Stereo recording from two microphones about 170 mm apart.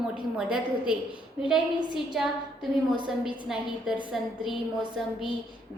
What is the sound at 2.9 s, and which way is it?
Speech, 30° right (ahead or behind).